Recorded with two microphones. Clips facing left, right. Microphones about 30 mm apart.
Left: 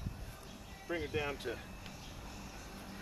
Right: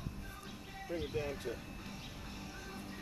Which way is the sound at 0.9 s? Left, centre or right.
Left.